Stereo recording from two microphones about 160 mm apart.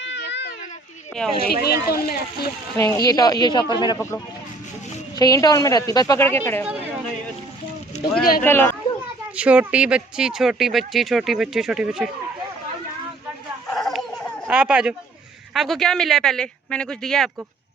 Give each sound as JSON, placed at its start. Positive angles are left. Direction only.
{"t": 0.1, "sound": "a sound", "side_deg": 90}
{"t": 1.4, "sound": "speech", "side_deg": 75}
{"t": 2.7, "sound": "a woman's voice", "side_deg": 20}
{"t": 5.1, "sound": "a woman's voice", "side_deg": 25}
{"t": 6.7, "sound": "a woman's voice", "side_deg": -10}
{"t": 8.2, "sound": "speech", "side_deg": 65}
{"t": 8.4, "sound": "speech", "side_deg": 15}
{"t": 9.3, "sound": "speech", "side_deg": -10}
{"t": 13.7, "sound": "a sound", "side_deg": 0}
{"t": 14.4, "sound": "speech", "side_deg": -5}